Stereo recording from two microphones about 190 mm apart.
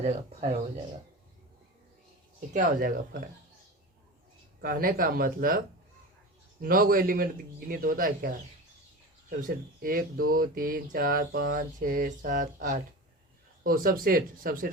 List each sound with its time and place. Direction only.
0.0 s speech: 35° right (ahead or behind)
2.5 s speech: 45° right (ahead or behind)
4.6 s speech: 50° right (ahead or behind)
9.4 s speech: 45° right (ahead or behind)